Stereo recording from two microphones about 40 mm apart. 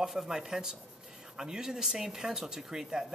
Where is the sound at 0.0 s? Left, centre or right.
Centre.